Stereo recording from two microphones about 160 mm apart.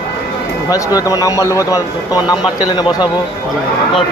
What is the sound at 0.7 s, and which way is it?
A man's voice, 20° left (ahead or behind).